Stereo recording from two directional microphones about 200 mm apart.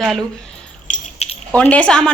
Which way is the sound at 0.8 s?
30° left (ahead or behind).